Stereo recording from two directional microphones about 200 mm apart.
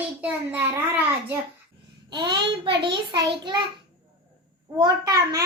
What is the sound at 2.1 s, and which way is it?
A child's voice, 20° right (ahead or behind).